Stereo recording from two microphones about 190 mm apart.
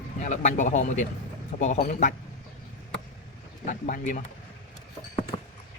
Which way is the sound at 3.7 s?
45° left (ahead or behind).